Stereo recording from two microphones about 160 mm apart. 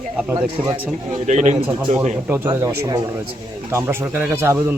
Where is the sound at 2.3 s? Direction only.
15° right (ahead or behind).